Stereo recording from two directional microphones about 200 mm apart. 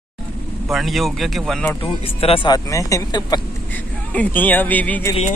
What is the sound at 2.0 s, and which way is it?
Speech, 30° left (ahead or behind).